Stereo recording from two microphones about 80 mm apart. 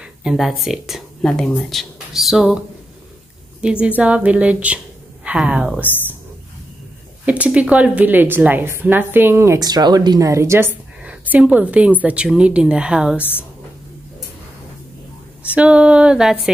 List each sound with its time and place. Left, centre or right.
0.0 s speech: centre
3.8 s speech: centre
7.2 s a woman's voice: centre
9.6 s speech: right
10.3 s a woman's voice: right
11.1 s a woman's voice: centre
13.2 s speech: left
15.5 s speech: centre